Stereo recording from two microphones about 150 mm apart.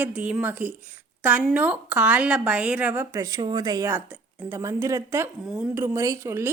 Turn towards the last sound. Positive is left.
turn(degrees=-15)  # may be behind; listen again after turning